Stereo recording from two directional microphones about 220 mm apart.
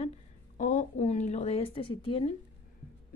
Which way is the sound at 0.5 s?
35° left (ahead or behind).